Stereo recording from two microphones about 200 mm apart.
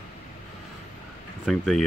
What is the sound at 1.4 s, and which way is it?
Speech, centre (ahead or behind).